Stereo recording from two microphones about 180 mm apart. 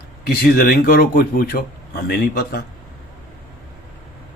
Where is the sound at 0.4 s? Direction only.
55° left (ahead or behind).